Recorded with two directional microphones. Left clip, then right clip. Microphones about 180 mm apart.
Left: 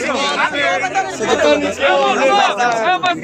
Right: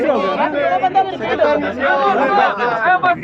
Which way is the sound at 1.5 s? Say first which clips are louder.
Left 3 dB; 5° left (ahead or behind).